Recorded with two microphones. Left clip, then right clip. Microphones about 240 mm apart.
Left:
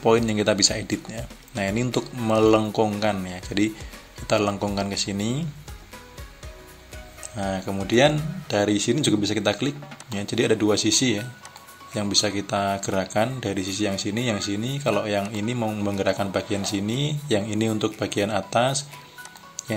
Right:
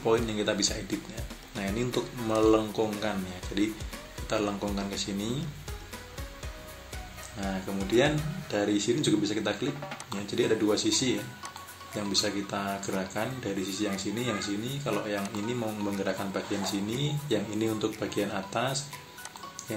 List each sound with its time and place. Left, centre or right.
0.0 s speech: left
7.3 s speech: left